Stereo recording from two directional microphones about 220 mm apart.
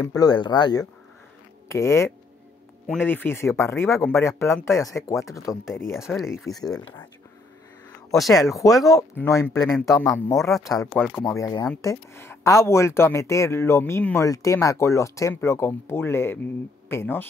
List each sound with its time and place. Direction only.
0.1 s speech: 20° left (ahead or behind)
6.1 s speech: centre (ahead or behind)
6.6 s speech: 15° left (ahead or behind)
8.1 s speech: centre (ahead or behind)
8.6 s speech: 15° left (ahead or behind)
11.0 s speech: centre (ahead or behind)
11.2 s speech: 15° left (ahead or behind)